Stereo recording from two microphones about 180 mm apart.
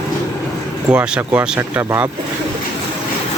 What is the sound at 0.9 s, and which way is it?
Speech, 5° right (ahead or behind).